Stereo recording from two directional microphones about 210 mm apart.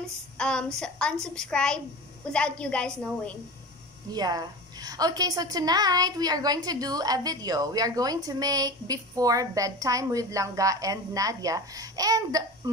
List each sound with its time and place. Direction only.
0.4 s a woman's voice: 5° left (ahead or behind)
4.1 s a woman's voice: 20° right (ahead or behind)